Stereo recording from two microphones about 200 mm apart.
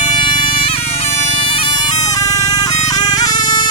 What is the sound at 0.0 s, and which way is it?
Bagpipes, 25° left (ahead or behind).